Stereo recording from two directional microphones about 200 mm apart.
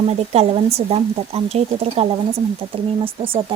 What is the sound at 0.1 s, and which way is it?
Speech, 30° right (ahead or behind).